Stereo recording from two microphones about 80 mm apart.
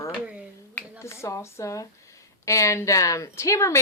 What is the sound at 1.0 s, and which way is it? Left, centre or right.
Speech, left.